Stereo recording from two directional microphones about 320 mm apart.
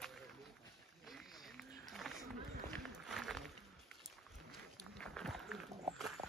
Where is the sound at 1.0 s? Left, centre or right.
Centre.